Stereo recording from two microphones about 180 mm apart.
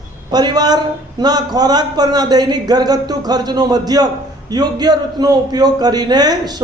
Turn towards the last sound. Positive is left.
turn(degrees=-20)  # may be behind; listen again after turning